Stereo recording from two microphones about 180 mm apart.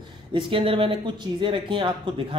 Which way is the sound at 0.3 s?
30° right (ahead or behind).